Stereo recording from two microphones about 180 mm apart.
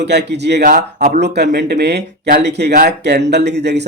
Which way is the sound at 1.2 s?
65° right (ahead or behind).